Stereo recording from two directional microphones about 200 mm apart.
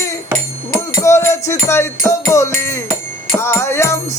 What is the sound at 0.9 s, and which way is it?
Music, 15° left (ahead or behind).